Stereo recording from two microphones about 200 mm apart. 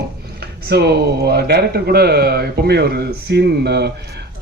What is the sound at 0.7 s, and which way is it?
Speech, 55° right (ahead or behind).